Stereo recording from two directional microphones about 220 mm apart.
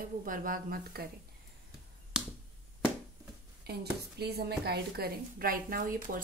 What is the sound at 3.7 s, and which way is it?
A woman's voice, 45° right (ahead or behind).